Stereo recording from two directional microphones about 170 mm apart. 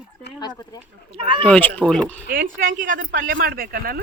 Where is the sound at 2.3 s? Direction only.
55° right (ahead or behind).